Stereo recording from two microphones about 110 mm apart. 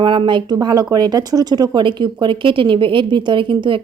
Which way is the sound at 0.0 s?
45° right (ahead or behind).